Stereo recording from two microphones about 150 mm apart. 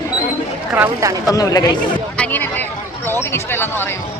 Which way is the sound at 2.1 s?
10° left (ahead or behind).